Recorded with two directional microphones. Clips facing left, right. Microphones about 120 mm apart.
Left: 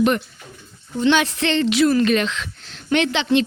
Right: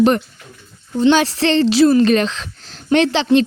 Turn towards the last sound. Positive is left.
turn(degrees=-35)  # may be behind; listen again after turning